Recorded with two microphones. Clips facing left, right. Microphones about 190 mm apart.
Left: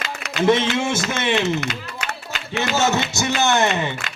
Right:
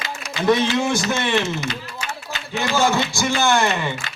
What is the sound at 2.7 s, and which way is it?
Speech, 20° left (ahead or behind).